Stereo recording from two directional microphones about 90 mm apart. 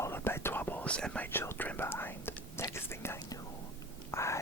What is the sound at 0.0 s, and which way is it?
Whispering, 25° left (ahead or behind).